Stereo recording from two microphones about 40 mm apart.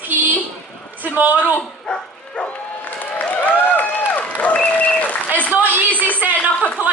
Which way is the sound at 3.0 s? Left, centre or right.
Left.